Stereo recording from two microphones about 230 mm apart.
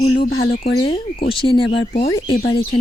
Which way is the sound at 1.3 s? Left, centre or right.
Left.